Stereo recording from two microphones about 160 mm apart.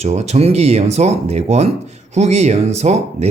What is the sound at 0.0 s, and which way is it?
Speech, 45° right (ahead or behind).